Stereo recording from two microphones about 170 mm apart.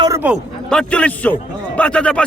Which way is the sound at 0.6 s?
5° left (ahead or behind).